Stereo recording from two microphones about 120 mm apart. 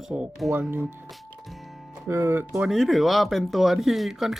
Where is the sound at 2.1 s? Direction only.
20° right (ahead or behind).